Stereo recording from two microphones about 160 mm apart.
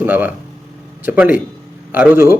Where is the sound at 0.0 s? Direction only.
10° right (ahead or behind).